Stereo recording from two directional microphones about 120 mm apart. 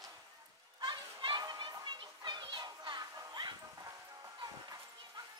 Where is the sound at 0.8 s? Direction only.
40° right (ahead or behind).